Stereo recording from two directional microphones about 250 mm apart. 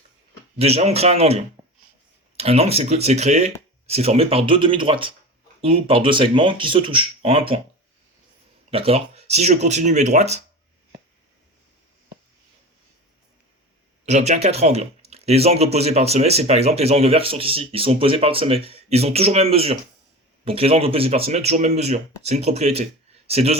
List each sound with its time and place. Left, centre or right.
0.6 s speech: right
8.7 s speech: right
14.0 s speech: right